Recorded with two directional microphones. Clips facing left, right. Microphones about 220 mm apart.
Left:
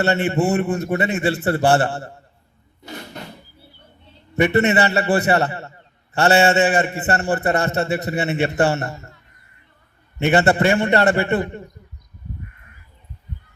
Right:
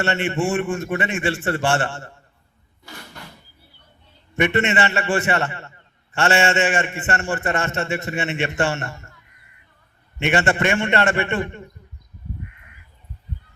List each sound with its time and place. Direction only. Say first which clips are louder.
0.0 s a man's voice: left 3 dB; 40° left (ahead or behind)
2.8 s a sound: left 7 dB; 20° left (ahead or behind)
4.4 s a man's voice: left 3 dB; 35° left (ahead or behind)
10.2 s a man's voice: left 4 dB; 35° left (ahead or behind)